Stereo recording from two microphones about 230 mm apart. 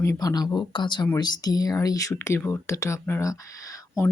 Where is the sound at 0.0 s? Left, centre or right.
Centre.